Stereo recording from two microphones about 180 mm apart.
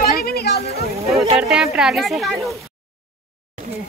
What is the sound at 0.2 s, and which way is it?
Chatter, 60° left (ahead or behind).